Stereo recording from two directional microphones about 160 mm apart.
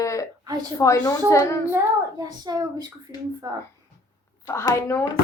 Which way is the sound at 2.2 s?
25° right (ahead or behind).